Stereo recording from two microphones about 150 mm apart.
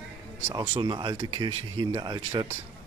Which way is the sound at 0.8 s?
30° right (ahead or behind).